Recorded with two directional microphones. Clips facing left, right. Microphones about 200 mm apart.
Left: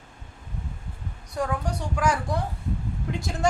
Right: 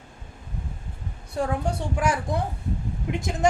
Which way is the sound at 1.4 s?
25° right (ahead or behind).